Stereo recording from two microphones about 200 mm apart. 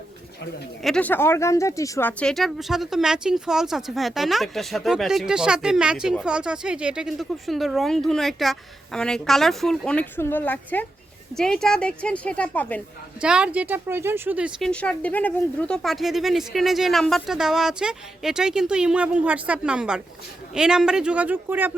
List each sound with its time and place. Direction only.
0.8 s speech: 5° left (ahead or behind)
13.2 s speech: 5° right (ahead or behind)
14.7 s speech: 5° left (ahead or behind)